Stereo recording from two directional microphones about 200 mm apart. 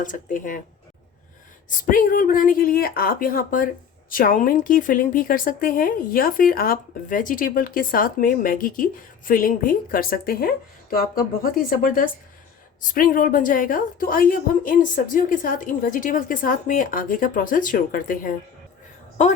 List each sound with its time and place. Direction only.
0.0 s speech: 40° left (ahead or behind)
1.9 s a woman's voice: 45° left (ahead or behind)